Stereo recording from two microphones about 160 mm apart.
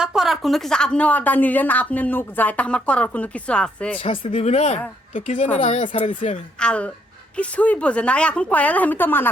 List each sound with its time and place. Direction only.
0.0 s speech: 5° right (ahead or behind)
4.0 s a woman's voice: 35° left (ahead or behind)
6.1 s a woman's voice: 50° left (ahead or behind)
6.6 s speech: 5° left (ahead or behind)